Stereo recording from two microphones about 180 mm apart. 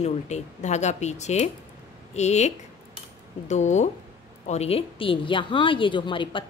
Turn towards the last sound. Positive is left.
turn(degrees=25)  # may be behind; listen again after turning